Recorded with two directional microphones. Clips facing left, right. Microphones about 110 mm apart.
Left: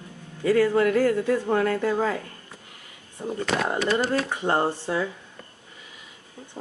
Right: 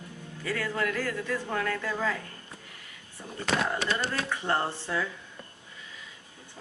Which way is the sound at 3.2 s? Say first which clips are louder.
Left 4 dB; 30° left (ahead or behind).